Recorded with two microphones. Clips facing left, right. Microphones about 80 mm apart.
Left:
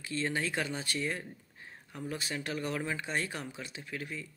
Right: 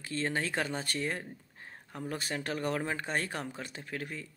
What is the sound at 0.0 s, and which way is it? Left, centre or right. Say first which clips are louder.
Speech: even; right.